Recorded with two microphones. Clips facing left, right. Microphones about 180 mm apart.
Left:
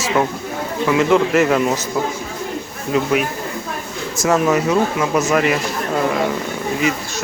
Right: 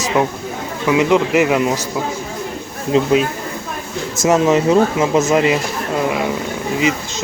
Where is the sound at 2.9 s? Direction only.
25° right (ahead or behind).